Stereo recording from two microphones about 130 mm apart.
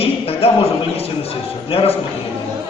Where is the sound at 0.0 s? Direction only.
50° left (ahead or behind).